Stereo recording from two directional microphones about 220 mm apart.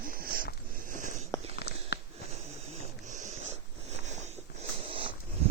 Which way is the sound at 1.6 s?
45° left (ahead or behind).